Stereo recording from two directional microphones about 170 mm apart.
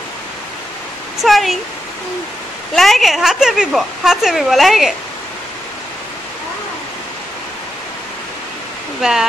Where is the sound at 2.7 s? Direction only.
Centre (ahead or behind).